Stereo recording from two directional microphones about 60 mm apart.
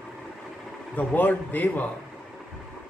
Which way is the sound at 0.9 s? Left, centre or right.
Left.